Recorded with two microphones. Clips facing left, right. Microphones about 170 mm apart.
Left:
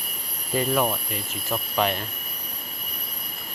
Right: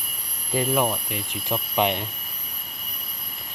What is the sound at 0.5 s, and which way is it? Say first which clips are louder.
Speech: even; 5° right (ahead or behind).